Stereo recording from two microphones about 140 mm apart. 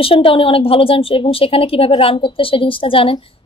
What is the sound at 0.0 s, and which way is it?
A woman's voice, 40° left (ahead or behind).